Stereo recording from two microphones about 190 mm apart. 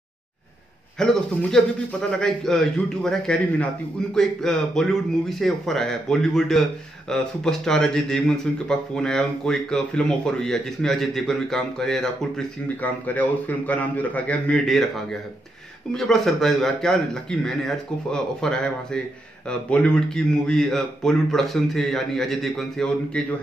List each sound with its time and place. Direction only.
0.9 s a man's voice: 5° left (ahead or behind)
15.9 s a man's voice: centre (ahead or behind)